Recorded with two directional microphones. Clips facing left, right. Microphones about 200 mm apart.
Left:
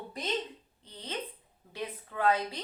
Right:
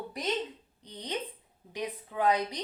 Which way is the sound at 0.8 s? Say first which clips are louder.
Right 3 dB; 15° right (ahead or behind).